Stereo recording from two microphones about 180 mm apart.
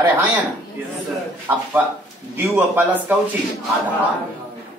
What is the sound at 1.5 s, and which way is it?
Speech, 15° right (ahead or behind).